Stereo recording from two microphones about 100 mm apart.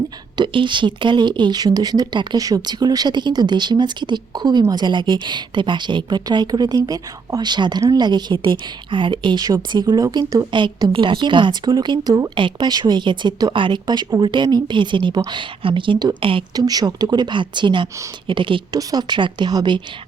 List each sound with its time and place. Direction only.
0.3 s a woman's voice: 55° right (ahead or behind)
18.7 s a woman's voice: 40° right (ahead or behind)